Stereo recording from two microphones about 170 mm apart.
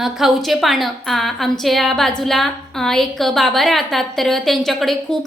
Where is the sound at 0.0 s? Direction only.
Centre (ahead or behind).